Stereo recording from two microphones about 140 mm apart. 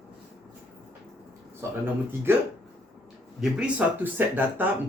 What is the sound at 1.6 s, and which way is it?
Speech, 20° right (ahead or behind).